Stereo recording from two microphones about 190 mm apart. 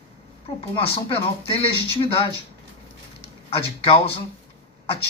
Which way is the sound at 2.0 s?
30° left (ahead or behind).